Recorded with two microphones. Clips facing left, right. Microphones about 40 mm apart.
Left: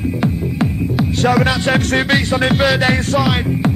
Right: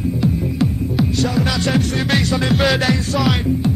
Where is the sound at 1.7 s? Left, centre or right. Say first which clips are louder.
Left 4 dB; left.